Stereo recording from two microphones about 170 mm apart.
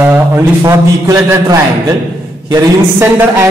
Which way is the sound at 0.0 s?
15° right (ahead or behind).